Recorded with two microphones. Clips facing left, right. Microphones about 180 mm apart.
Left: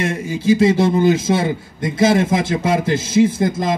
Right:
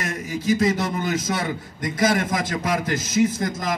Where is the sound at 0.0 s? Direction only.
30° left (ahead or behind).